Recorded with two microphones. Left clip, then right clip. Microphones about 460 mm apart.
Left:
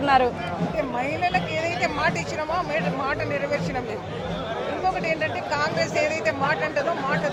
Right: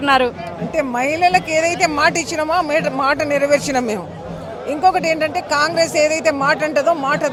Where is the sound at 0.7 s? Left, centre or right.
Right.